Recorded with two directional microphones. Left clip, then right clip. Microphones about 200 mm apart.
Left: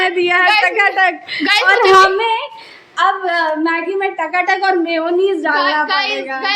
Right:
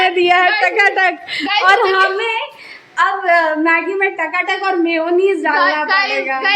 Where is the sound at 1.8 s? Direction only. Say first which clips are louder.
Left 5 dB; 45° left (ahead or behind).